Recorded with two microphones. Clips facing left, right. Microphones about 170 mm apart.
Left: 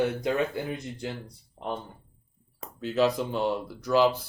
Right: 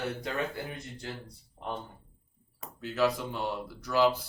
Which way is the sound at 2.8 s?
20° left (ahead or behind).